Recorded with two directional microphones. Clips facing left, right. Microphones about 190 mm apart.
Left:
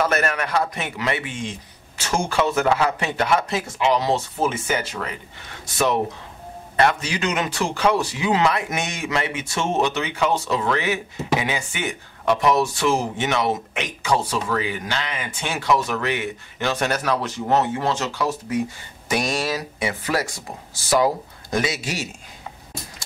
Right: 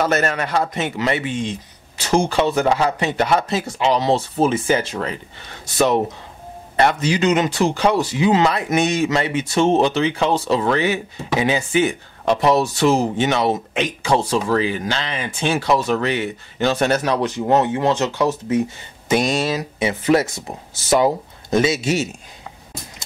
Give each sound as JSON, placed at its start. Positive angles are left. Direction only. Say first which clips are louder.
{"t": 0.0, "sound": "speech", "louder": "right 2 dB", "side_deg": -25}
{"t": 6.8, "sound": "speech", "louder": "right 4 dB", "side_deg": -25}
{"t": 7.4, "sound": "speech", "louder": "right 4 dB", "side_deg": -35}